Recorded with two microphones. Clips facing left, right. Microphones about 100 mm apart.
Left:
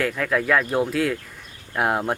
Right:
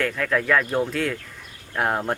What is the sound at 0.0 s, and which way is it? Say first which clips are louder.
Speech: left 1 dB; 5° left (ahead or behind).